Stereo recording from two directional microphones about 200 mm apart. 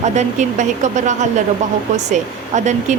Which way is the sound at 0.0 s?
35° right (ahead or behind).